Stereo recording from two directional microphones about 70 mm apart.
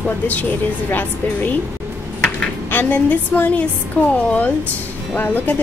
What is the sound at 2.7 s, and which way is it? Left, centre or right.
Speech, left.